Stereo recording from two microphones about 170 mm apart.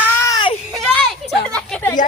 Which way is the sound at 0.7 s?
Centre (ahead or behind).